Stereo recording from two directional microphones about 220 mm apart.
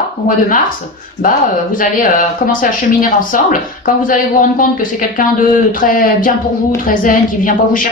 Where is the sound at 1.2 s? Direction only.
40° left (ahead or behind).